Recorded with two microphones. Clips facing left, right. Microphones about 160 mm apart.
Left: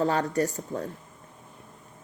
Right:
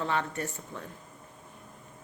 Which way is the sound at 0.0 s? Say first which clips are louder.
Left 7 dB; 40° left (ahead or behind).